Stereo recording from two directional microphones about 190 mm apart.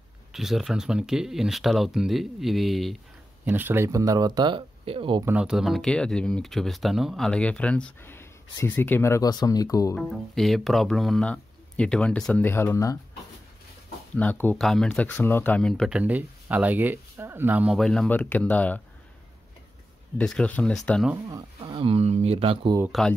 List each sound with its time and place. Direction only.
0.3 s speech: centre (ahead or behind)
3.4 s speech: 10° right (ahead or behind); by 5.2 s 25° right (ahead or behind)
5.2 s speech: 5° right (ahead or behind); by 9.9 s 20° left (ahead or behind)
9.9 s speech: centre (ahead or behind)
14.1 s speech: 10° left (ahead or behind)
16.0 s speech: 10° right (ahead or behind); by 18.8 s 10° left (ahead or behind)
20.2 s speech: 5° left (ahead or behind)
21.3 s speech: 25° right (ahead or behind)
22.8 s speech: centre (ahead or behind)